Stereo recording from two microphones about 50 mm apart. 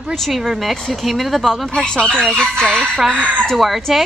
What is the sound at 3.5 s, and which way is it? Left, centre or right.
Speech, centre.